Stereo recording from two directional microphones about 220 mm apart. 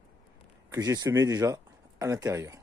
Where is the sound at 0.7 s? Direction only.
15° right (ahead or behind).